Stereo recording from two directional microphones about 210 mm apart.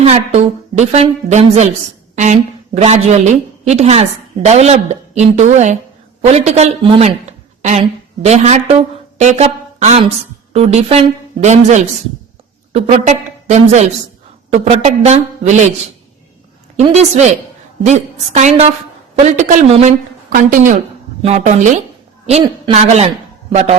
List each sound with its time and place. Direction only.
0.0 s a woman's voice: 30° right (ahead or behind)
16.7 s a woman's voice: 30° right (ahead or behind)